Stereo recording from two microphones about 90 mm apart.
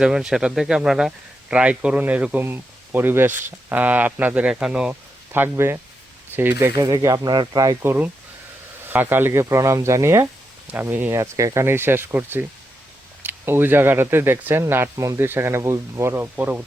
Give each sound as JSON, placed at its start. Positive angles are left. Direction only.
{"t": 0.0, "sound": "speech", "side_deg": -5}
{"t": 5.3, "sound": "speech", "side_deg": -25}
{"t": 6.7, "sound": "speech", "side_deg": -40}
{"t": 8.9, "sound": "speech", "side_deg": -20}
{"t": 11.2, "sound": "speech", "side_deg": -35}
{"t": 16.2, "sound": "speech", "side_deg": -20}